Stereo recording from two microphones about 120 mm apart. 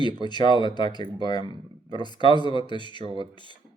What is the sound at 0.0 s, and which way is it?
Speech, 40° left (ahead or behind).